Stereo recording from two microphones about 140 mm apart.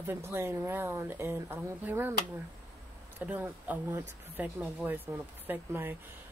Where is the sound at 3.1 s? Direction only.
10° right (ahead or behind).